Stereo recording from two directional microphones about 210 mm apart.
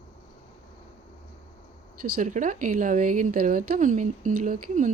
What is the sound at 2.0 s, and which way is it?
A woman's voice, 40° right (ahead or behind).